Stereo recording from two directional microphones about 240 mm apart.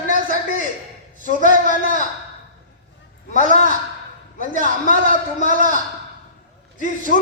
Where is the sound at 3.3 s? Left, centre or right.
Left.